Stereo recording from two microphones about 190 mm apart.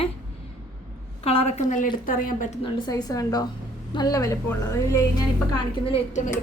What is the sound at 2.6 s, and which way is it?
A woman's voice, 25° left (ahead or behind).